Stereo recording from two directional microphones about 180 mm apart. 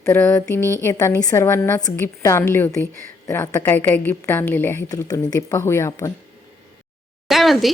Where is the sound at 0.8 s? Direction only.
15° left (ahead or behind).